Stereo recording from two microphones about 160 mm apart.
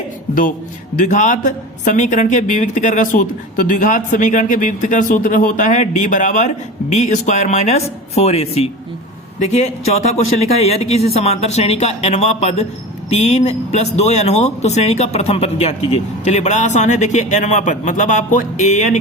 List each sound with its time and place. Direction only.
0.9 s speech: 50° left (ahead or behind)